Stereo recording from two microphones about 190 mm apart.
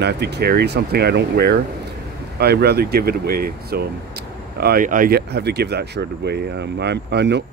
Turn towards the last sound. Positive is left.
turn(degrees=-65)  # may be behind; listen again after turning